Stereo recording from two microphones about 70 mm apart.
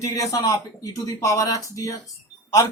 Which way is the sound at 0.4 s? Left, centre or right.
Left.